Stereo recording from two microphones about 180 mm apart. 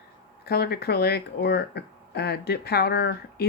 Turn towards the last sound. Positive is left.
turn(degrees=65)  # may be behind; listen again after turning